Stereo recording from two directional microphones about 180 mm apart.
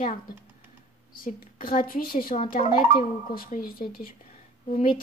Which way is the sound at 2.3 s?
40° left (ahead or behind).